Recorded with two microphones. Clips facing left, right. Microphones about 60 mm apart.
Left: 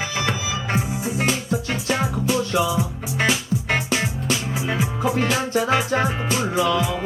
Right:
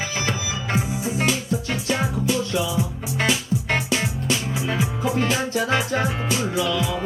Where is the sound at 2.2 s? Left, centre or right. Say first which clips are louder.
Left 2 dB; left.